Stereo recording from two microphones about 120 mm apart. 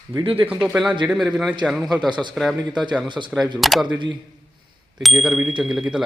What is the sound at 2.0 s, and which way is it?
Speech, 40° right (ahead or behind).